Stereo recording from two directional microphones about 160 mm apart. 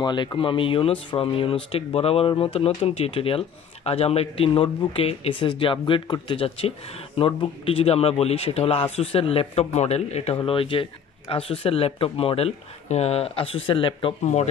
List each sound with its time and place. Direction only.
0.0 s speech: 30° left (ahead or behind)
14.2 s speech: 45° left (ahead or behind)